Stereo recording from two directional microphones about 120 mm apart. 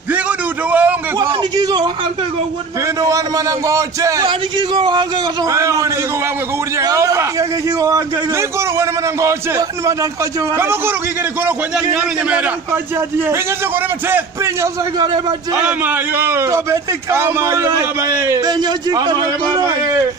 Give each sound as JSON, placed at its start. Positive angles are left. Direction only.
{"t": 0.7, "sound": "a sound", "side_deg": -15}
{"t": 1.6, "sound": "a man's voice", "side_deg": -35}
{"t": 3.0, "sound": "a man's voice", "side_deg": -30}
{"t": 4.3, "sound": "a man's voice", "side_deg": -40}
{"t": 5.5, "sound": "a man's voice", "side_deg": -25}
{"t": 14.1, "sound": "a man's voice", "side_deg": -25}
{"t": 15.5, "sound": "a man's voice", "side_deg": -10}